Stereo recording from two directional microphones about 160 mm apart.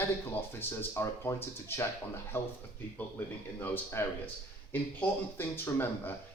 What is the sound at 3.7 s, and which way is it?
Speech, 15° left (ahead or behind).